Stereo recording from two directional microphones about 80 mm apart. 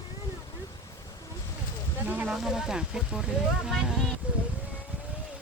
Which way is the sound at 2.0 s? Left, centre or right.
Centre.